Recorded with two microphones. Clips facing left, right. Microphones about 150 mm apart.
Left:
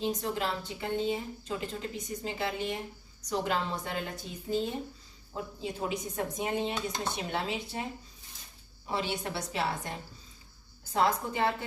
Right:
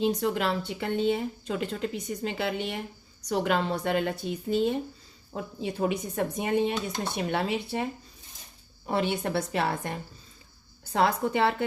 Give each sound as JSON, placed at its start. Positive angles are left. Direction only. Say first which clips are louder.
{"t": 0.0, "sound": "a woman's voice", "louder": "right 6 dB", "side_deg": -70}
{"t": 8.9, "sound": "a woman's voice", "louder": "right 6 dB", "side_deg": -55}
{"t": 10.9, "sound": "speech", "louder": "right 4 dB", "side_deg": -70}